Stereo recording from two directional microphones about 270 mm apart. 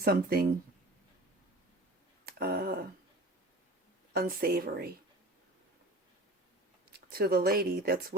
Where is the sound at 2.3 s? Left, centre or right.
Right.